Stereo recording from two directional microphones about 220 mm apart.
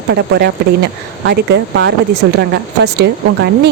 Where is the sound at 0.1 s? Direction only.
50° right (ahead or behind).